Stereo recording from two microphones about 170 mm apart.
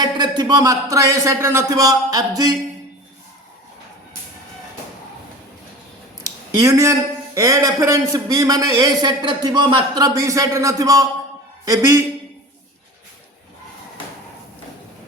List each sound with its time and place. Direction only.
0.0 s a man's voice: 25° right (ahead or behind)
6.2 s a sound: 20° right (ahead or behind)
7.3 s a man's voice: 20° right (ahead or behind)